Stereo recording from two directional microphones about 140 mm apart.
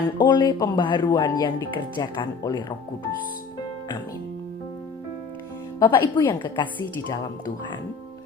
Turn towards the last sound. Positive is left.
turn(degrees=30)  # may be behind; listen again after turning